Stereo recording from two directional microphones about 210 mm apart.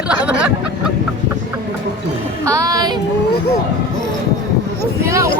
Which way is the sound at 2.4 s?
15° right (ahead or behind).